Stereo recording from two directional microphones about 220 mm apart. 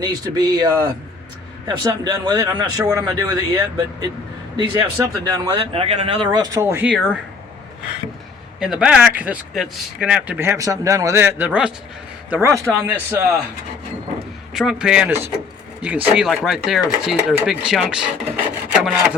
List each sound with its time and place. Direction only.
0.0 s speech: 20° right (ahead or behind)
8.5 s speech: 5° right (ahead or behind)
14.5 s speech: centre (ahead or behind)
18.7 s wood: 5° right (ahead or behind)